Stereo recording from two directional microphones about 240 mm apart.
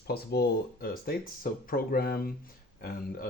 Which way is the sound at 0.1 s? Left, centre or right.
Left.